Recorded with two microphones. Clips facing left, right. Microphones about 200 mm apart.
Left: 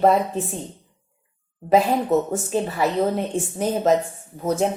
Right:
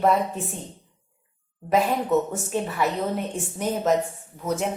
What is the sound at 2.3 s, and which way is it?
A woman's voice, 30° left (ahead or behind).